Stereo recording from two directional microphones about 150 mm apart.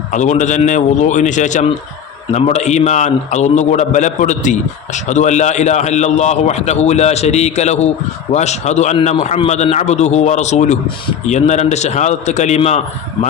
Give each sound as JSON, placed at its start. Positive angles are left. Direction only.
{"t": 0.1, "sound": "a man's voice", "side_deg": 55}